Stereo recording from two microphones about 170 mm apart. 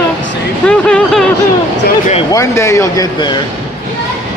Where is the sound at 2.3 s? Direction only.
15° left (ahead or behind).